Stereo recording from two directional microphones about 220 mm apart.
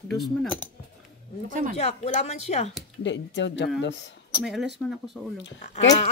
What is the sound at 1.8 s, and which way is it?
Speech, 30° left (ahead or behind).